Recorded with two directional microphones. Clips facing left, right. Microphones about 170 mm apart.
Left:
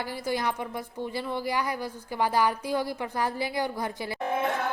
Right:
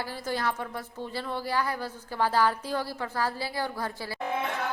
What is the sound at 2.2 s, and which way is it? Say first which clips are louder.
Speech: even; 15° left (ahead or behind).